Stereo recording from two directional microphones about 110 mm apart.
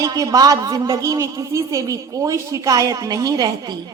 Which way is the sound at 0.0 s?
35° right (ahead or behind).